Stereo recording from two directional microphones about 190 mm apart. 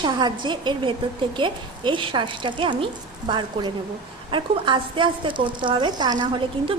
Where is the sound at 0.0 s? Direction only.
20° right (ahead or behind).